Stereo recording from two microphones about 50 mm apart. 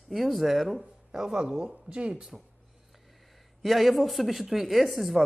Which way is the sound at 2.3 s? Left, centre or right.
Centre.